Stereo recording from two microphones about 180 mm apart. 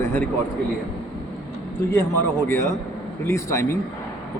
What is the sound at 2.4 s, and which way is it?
A man's voice, 15° left (ahead or behind).